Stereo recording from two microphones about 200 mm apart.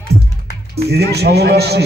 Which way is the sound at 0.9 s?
55° right (ahead or behind).